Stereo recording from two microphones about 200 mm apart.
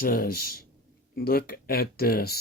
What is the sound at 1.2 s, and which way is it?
Speech, 50° left (ahead or behind).